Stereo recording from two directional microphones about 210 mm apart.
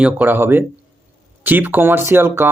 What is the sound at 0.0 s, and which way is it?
Speech, 10° right (ahead or behind).